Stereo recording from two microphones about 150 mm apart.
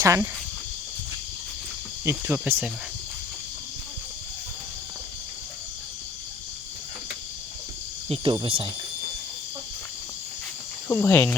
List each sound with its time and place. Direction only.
0.0 s speech: 20° right (ahead or behind)
2.0 s speech: 15° right (ahead or behind)
8.1 s cricket: 35° right (ahead or behind)
10.8 s speech: 15° left (ahead or behind)